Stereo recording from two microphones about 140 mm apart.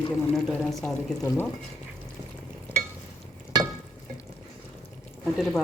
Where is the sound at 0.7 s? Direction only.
Centre (ahead or behind).